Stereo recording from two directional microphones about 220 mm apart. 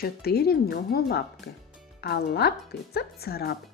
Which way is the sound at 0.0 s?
45° left (ahead or behind).